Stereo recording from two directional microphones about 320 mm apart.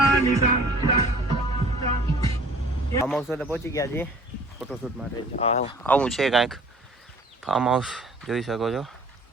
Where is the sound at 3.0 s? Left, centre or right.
Centre.